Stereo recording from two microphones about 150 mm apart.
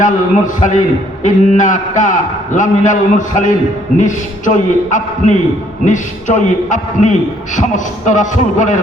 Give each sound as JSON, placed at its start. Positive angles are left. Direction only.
{"t": 0.0, "sound": "a man's voice", "side_deg": 60}